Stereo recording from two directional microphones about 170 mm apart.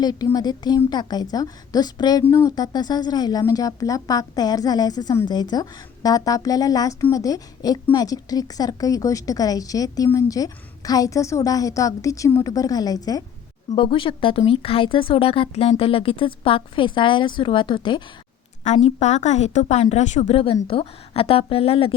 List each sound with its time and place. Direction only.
0.0 s speech: 25° left (ahead or behind)
18.6 s speech: 40° left (ahead or behind)